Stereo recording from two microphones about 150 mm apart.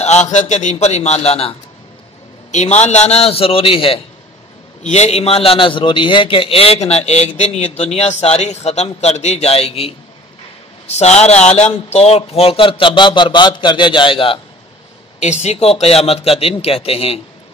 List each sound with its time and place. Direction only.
0.0 s a man's voice: 50° left (ahead or behind)
2.5 s a man's voice: 50° left (ahead or behind)
4.8 s a man's voice: 45° left (ahead or behind)
15.1 s a man's voice: 50° left (ahead or behind)